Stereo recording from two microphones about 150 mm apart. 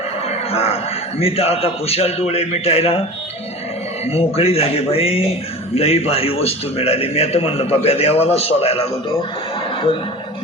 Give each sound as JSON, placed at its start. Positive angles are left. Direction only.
{"t": 0.3, "sound": "a sound", "side_deg": 40}
{"t": 1.2, "sound": "speech", "side_deg": 40}
{"t": 4.0, "sound": "speech", "side_deg": 40}